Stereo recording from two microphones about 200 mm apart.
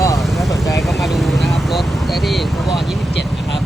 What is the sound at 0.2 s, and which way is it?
Vehicle, centre (ahead or behind).